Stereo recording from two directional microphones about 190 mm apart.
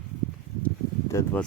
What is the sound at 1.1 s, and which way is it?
Speech, 15° left (ahead or behind).